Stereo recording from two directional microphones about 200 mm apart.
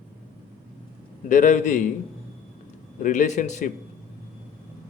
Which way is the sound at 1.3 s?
40° left (ahead or behind).